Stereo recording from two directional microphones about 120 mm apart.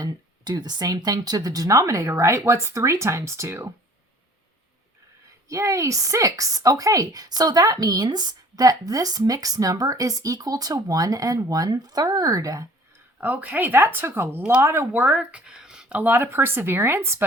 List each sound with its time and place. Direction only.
0.0 s speech: 35° right (ahead or behind)
5.5 s speech: 25° right (ahead or behind)
13.1 s speech: 15° right (ahead or behind)